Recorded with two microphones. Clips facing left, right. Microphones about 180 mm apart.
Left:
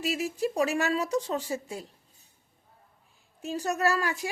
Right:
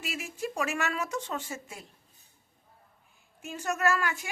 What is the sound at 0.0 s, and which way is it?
Speech, 35° left (ahead or behind).